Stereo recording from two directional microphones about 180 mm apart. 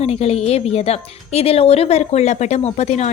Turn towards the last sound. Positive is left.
turn(degrees=40)  # may be behind; listen again after turning